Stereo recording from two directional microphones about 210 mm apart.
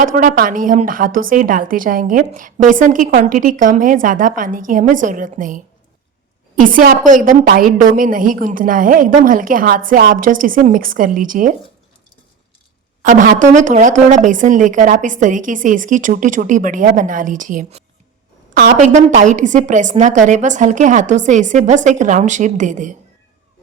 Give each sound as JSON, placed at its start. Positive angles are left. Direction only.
{"t": 0.0, "sound": "a woman's voice", "side_deg": -40}
{"t": 13.1, "sound": "a woman's voice", "side_deg": -40}